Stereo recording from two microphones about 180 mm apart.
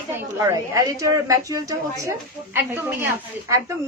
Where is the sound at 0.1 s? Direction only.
15° right (ahead or behind).